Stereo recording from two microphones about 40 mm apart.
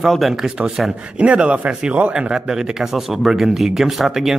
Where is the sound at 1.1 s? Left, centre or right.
Right.